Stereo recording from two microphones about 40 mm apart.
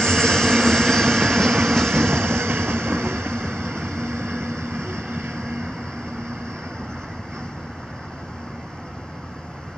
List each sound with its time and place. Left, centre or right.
0.0 s vehicle: centre
2.0 s vehicle: right
5.3 s vehicle: centre